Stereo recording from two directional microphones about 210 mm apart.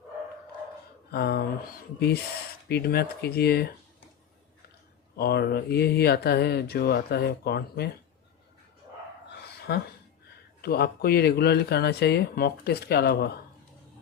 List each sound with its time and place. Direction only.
1.1 s speech: 50° left (ahead or behind)
5.1 s speech: 50° left (ahead or behind)
10.6 s speech: 50° left (ahead or behind)